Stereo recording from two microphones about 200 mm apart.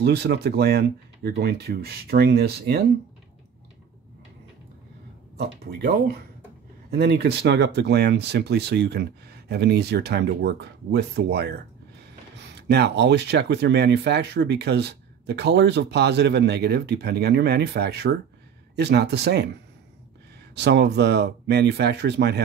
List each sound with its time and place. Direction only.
0.0 s speech: 55° right (ahead or behind)
5.4 s speech: 55° right (ahead or behind)
20.5 s speech: 60° right (ahead or behind)